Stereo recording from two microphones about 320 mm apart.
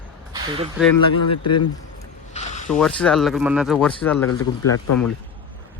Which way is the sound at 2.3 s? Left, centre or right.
Left.